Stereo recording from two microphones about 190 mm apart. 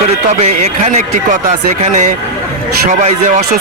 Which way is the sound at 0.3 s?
35° right (ahead or behind).